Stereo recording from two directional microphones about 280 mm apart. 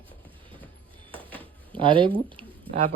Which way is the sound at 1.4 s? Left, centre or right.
Centre.